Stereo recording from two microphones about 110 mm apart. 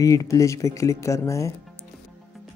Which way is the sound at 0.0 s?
30° left (ahead or behind).